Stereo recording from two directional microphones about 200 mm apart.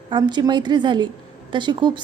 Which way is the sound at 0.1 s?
20° right (ahead or behind).